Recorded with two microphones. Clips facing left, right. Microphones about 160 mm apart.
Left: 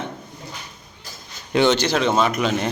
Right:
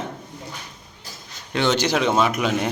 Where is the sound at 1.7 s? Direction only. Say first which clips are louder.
Even; 15° right (ahead or behind).